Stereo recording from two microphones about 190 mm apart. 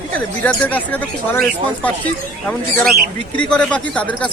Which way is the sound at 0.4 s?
10° left (ahead or behind).